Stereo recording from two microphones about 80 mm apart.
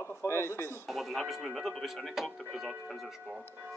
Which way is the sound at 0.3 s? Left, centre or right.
Left.